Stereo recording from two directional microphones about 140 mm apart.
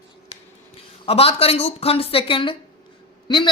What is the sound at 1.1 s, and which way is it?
Speech, 45° left (ahead or behind).